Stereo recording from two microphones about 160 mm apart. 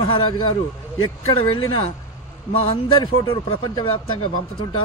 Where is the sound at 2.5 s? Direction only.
35° left (ahead or behind).